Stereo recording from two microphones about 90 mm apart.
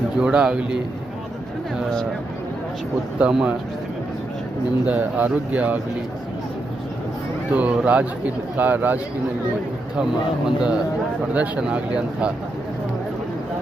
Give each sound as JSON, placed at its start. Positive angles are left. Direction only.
{"t": 0.2, "sound": "a man's voice", "side_deg": -10}
{"t": 3.2, "sound": "a man's voice", "side_deg": -10}
{"t": 4.9, "sound": "a man's voice", "side_deg": -20}
{"t": 7.5, "sound": "a man's voice", "side_deg": -15}
{"t": 10.0, "sound": "a man's voice", "side_deg": -10}